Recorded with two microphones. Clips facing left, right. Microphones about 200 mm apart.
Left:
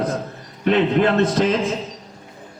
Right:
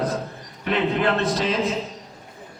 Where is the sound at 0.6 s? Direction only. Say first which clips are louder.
Left 5 dB; 40° left (ahead or behind).